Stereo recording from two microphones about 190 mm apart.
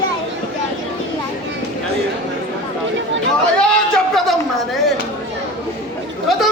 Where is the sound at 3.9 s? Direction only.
Centre (ahead or behind).